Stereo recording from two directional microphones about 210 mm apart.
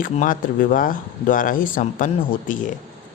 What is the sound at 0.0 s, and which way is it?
Speech, 40° left (ahead or behind).